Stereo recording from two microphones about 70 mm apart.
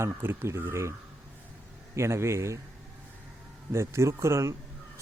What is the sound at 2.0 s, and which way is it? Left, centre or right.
Speech, right.